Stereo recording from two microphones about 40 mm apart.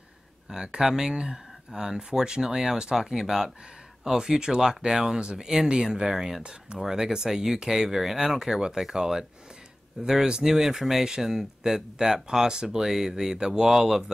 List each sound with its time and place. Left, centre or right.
0.5 s speech: centre